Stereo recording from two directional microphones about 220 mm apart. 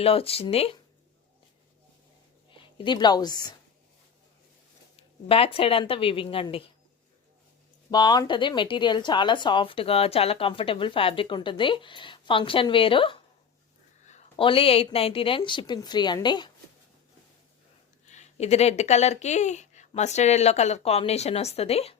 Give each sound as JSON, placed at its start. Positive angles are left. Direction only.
{"t": 0.0, "sound": "speech", "side_deg": 25}
{"t": 2.5, "sound": "a woman's voice", "side_deg": 25}
{"t": 4.9, "sound": "speech", "side_deg": 25}
{"t": 7.9, "sound": "speech", "side_deg": 20}
{"t": 18.0, "sound": "speech", "side_deg": 30}